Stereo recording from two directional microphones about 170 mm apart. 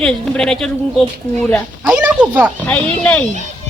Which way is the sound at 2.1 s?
10° right (ahead or behind).